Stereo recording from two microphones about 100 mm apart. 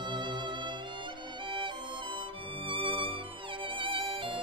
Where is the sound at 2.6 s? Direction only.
55° right (ahead or behind).